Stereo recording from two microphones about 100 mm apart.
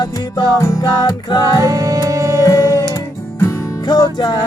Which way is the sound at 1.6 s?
35° right (ahead or behind).